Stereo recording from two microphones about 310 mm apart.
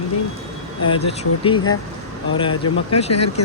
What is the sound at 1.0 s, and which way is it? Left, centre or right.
Speech, centre.